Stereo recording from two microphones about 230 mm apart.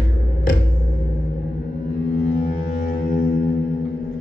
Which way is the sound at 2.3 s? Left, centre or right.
Left.